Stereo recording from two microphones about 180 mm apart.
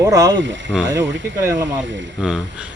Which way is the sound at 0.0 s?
20° right (ahead or behind).